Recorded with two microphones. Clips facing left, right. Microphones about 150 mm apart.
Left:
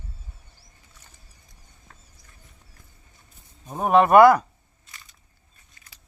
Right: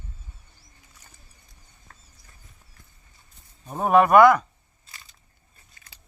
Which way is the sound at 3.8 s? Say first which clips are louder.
Even; 25° left (ahead or behind).